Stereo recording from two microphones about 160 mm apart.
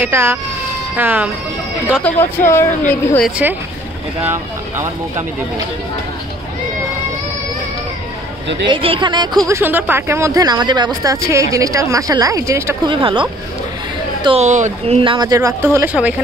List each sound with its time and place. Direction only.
0.0 s speech: 15° right (ahead or behind)
2.1 s a woman's voice: 10° left (ahead or behind)
3.3 s speech: 10° right (ahead or behind)
8.6 s speech: 35° right (ahead or behind)
9.5 s speech: 15° right (ahead or behind)
12.8 s speech: 30° right (ahead or behind)
14.2 s speech: 40° right (ahead or behind)
15.0 s speech: 30° right (ahead or behind); by 16.2 s 10° right (ahead or behind)